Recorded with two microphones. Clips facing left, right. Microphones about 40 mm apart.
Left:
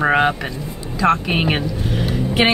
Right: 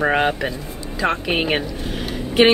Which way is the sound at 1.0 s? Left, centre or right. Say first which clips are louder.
Left 4 dB; centre.